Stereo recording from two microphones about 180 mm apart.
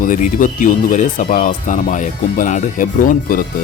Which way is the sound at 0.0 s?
45° left (ahead or behind).